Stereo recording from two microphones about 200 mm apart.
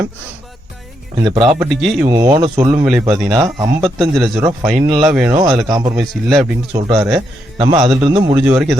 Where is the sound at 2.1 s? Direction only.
15° right (ahead or behind).